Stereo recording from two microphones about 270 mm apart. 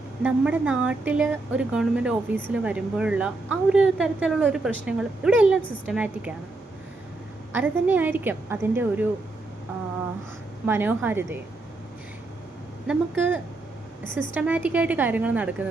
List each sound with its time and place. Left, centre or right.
0.2 s speech: centre
7.5 s a woman's voice: centre
10.7 s a woman's voice: centre
12.9 s speech: centre
14.0 s a woman's voice: left
14.3 s speech: centre